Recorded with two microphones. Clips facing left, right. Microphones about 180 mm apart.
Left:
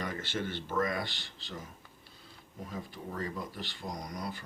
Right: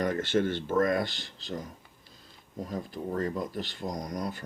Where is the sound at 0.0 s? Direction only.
50° right (ahead or behind).